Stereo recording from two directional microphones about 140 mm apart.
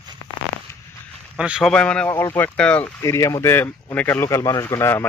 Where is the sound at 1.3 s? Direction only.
5° right (ahead or behind).